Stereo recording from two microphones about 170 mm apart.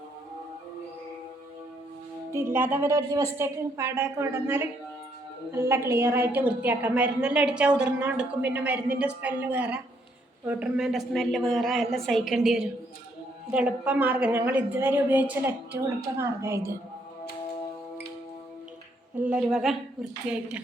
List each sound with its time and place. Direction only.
2.3 s a woman's voice: 15° right (ahead or behind)
19.3 s a woman's voice: 5° right (ahead or behind)